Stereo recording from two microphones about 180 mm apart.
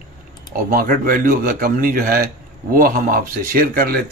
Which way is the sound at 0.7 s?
55° right (ahead or behind).